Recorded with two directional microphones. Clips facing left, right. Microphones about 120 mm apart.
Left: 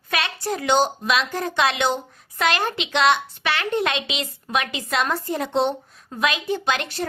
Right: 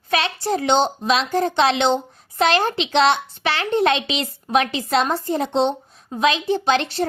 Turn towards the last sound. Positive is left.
turn(degrees=-30)  # may be behind; listen again after turning